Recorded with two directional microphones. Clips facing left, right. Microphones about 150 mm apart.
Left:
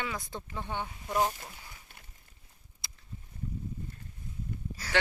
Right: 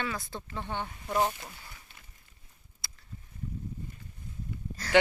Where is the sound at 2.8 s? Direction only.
20° left (ahead or behind).